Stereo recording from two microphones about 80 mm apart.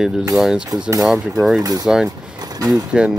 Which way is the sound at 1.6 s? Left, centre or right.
Right.